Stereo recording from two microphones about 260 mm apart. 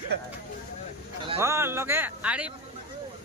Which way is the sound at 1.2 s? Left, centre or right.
Centre.